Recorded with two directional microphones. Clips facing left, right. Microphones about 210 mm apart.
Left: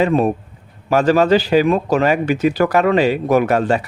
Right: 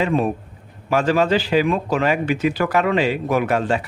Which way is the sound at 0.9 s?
40° left (ahead or behind).